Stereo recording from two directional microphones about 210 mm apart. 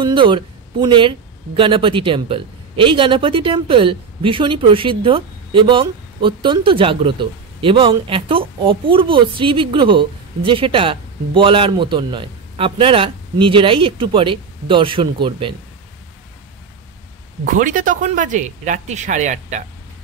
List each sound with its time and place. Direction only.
0.0 s speech: 25° right (ahead or behind)
17.5 s speech: 40° right (ahead or behind)